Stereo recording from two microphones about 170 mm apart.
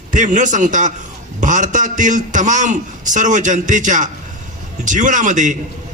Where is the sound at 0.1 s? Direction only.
50° right (ahead or behind).